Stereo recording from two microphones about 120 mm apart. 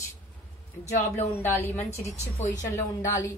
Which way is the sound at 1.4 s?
20° left (ahead or behind).